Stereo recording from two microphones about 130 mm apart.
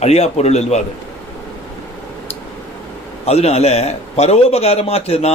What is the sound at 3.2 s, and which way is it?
A man's voice, 55° left (ahead or behind).